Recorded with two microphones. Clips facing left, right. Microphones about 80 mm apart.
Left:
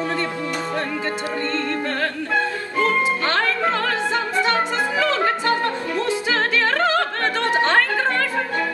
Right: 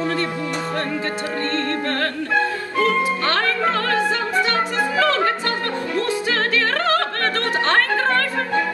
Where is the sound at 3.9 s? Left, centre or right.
Left.